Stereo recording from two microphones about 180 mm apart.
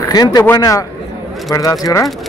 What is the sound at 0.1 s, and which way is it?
Speech, 20° left (ahead or behind).